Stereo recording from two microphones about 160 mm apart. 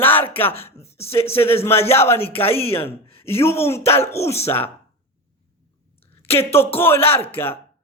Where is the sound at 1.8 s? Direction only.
15° left (ahead or behind).